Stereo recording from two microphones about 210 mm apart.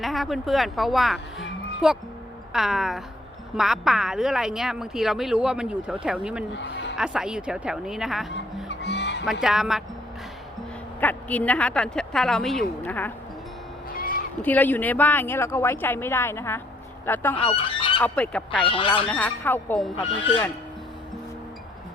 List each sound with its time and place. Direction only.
0.0 s a woman's voice: centre (ahead or behind)
6.5 s a sound: 55° left (ahead or behind)
6.9 s a woman's voice: 5° right (ahead or behind)
8.6 s music: 55° left (ahead or behind)
9.2 s a woman's voice: centre (ahead or behind)
11.0 s a woman's voice: 5° left (ahead or behind)
13.9 s crow: 45° left (ahead or behind)
14.4 s speech: 10° left (ahead or behind)
17.4 s goose: 25° left (ahead or behind)
18.0 s a woman's voice: 5° left (ahead or behind)
18.6 s speech: 25° left (ahead or behind)
19.0 s speech: 5° left (ahead or behind)